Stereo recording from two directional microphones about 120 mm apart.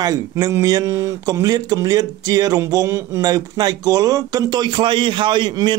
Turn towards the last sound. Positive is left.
turn(degrees=-40)  # may be behind; listen again after turning